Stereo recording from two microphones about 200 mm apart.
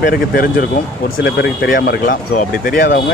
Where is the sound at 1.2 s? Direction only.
60° left (ahead or behind).